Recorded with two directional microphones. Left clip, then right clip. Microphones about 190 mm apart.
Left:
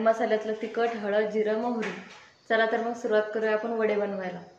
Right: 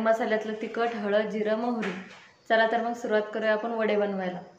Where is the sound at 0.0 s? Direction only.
40° right (ahead or behind).